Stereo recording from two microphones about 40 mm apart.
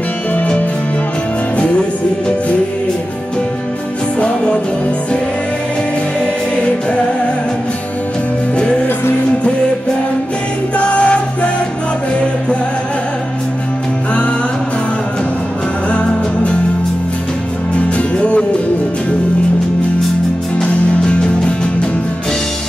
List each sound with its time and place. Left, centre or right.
0.3 s music: left
11.0 s music: left
17.7 s music: left
20.5 s music: left